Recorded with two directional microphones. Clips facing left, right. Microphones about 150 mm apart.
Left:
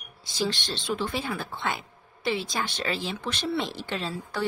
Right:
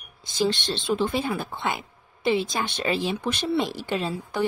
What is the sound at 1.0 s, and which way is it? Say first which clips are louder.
A woman's voice: right 5 dB; 15° right (ahead or behind).